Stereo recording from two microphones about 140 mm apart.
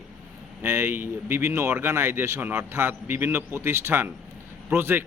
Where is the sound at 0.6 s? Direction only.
15° right (ahead or behind).